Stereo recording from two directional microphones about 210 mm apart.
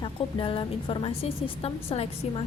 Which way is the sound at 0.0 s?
25° left (ahead or behind).